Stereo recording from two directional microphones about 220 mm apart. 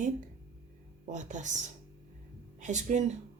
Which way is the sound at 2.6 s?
35° right (ahead or behind).